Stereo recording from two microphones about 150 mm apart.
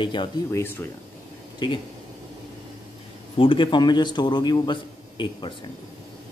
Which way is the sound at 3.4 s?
35° left (ahead or behind).